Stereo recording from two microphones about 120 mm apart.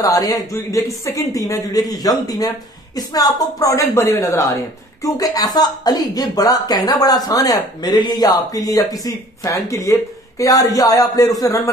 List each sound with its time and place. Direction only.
0.0 s speech: 30° left (ahead or behind)